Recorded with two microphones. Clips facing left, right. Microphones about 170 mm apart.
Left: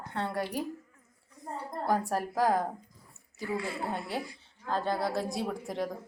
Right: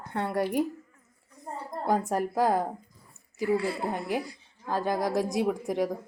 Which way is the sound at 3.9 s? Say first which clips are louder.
Right 4 dB; 15° right (ahead or behind).